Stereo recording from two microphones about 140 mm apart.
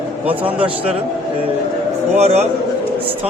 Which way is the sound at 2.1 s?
50° right (ahead or behind).